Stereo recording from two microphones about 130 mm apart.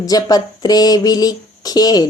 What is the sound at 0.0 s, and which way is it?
Speech, 30° left (ahead or behind).